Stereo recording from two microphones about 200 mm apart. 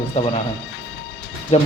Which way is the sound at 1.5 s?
30° left (ahead or behind).